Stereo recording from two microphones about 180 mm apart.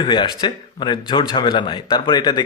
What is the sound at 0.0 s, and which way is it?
Speech, 25° left (ahead or behind).